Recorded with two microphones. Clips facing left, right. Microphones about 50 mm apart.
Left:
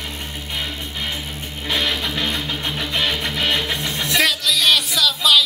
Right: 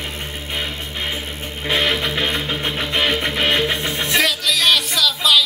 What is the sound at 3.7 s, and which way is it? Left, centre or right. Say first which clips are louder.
Music: right 2 dB; centre.